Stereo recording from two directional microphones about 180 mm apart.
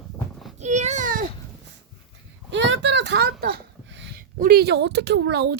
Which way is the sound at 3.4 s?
75° right (ahead or behind).